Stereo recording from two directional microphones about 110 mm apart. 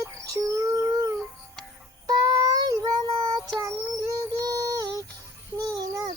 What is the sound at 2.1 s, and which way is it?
Child singing, 35° right (ahead or behind).